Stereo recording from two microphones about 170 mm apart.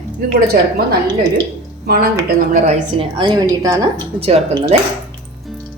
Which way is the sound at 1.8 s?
65° right (ahead or behind).